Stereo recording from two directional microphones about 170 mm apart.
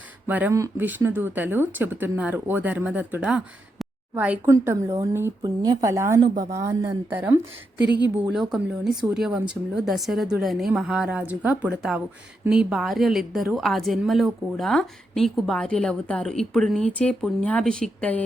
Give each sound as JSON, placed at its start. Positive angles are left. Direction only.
{"t": 0.3, "sound": "a woman's voice", "side_deg": -10}